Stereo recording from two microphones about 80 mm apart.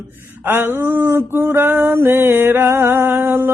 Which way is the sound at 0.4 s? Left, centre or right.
Right.